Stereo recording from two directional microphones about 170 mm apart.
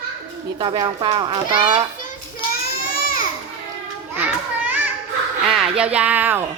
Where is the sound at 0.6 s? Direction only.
25° right (ahead or behind).